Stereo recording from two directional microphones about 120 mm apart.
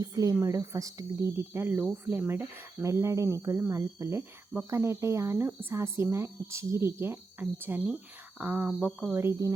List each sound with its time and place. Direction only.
0.0 s a woman's voice: 30° right (ahead or behind)